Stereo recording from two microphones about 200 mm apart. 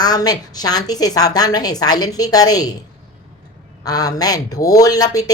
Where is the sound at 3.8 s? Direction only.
20° left (ahead or behind).